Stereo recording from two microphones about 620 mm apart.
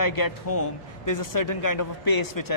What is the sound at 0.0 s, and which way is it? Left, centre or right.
A man's voice, left.